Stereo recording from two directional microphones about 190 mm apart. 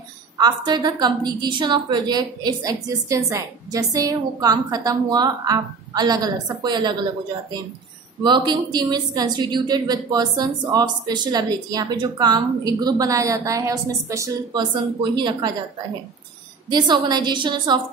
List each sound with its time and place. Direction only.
0.4 s a woman's voice: 20° right (ahead or behind)
8.2 s a woman's voice: 25° right (ahead or behind)
16.7 s a woman's voice: 20° right (ahead or behind)